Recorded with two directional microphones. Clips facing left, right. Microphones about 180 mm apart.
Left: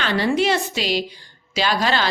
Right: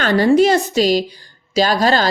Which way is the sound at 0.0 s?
45° right (ahead or behind).